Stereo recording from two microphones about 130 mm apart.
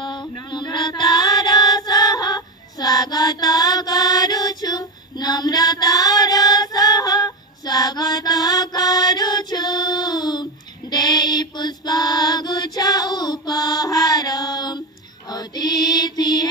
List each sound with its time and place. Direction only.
0.0 s mantra: 35° left (ahead or behind)
0.5 s music: 35° left (ahead or behind)
15.2 s mantra: 30° left (ahead or behind)